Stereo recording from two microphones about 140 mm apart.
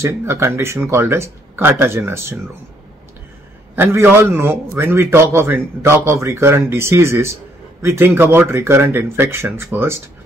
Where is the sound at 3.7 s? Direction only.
15° right (ahead or behind).